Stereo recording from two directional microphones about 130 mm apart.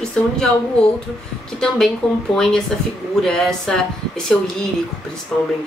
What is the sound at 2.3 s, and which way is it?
Speech, 5° left (ahead or behind).